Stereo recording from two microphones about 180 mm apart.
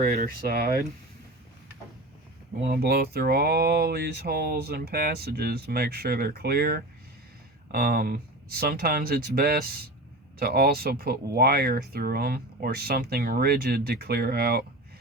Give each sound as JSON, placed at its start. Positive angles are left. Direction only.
{"t": 0.1, "sound": "speech", "side_deg": -60}
{"t": 2.6, "sound": "speech", "side_deg": -60}